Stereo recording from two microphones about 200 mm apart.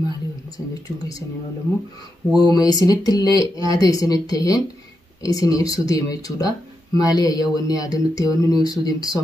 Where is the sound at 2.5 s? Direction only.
20° left (ahead or behind).